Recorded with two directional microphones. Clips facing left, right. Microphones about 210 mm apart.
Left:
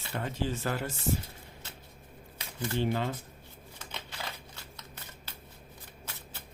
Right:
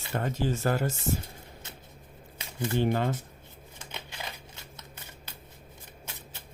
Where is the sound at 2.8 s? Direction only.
50° right (ahead or behind).